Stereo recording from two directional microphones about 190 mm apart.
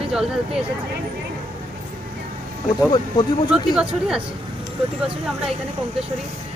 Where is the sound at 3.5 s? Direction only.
5° right (ahead or behind).